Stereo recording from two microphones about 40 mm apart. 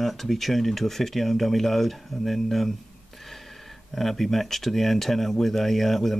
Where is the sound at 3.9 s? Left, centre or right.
Centre.